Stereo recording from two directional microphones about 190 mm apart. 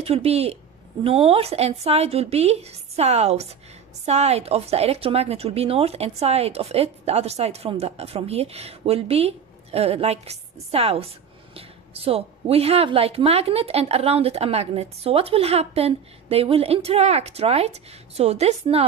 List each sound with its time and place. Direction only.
0.0 s a woman's voice: 30° right (ahead or behind)